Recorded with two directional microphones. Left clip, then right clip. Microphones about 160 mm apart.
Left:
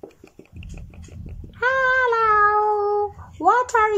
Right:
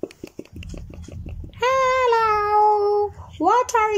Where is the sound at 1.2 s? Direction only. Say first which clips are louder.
Even; 5° right (ahead or behind).